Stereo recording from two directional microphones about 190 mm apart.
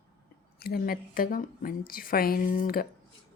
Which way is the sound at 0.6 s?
55° left (ahead or behind).